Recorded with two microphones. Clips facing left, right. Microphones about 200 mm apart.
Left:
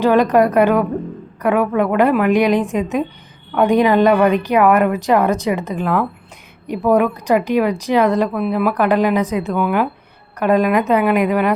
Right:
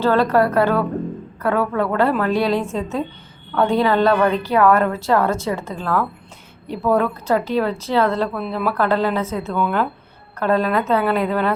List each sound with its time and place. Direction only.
0.0 s a woman's voice: 15° left (ahead or behind)